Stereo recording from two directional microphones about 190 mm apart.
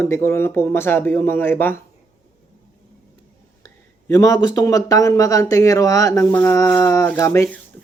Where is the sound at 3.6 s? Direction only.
15° left (ahead or behind).